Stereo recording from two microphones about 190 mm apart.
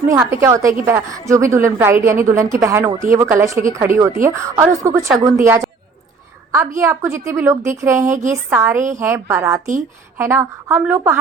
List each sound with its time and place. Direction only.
0.1 s a woman's voice: 15° right (ahead or behind)
6.7 s a woman's voice: 15° right (ahead or behind)